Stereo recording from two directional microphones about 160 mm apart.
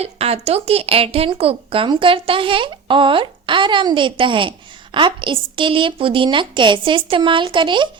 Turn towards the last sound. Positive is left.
turn(degrees=-30)  # may be behind; listen again after turning